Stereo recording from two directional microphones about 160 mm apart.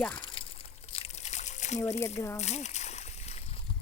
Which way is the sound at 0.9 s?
45° left (ahead or behind).